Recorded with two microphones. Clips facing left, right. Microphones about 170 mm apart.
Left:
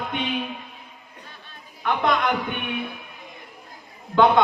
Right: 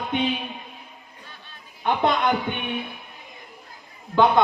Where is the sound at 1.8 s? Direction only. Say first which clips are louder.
Right 1 dB; 30° right (ahead or behind).